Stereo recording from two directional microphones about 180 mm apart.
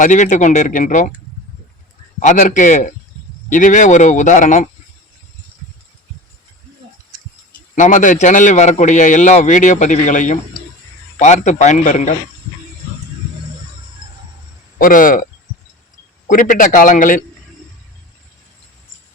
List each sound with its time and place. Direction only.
0.0 s a man's voice: 45° left (ahead or behind)
2.1 s a man's voice: 45° left (ahead or behind)
7.8 s a man's voice: 45° left (ahead or behind)
14.8 s a man's voice: 50° left (ahead or behind)
16.3 s a man's voice: 50° left (ahead or behind)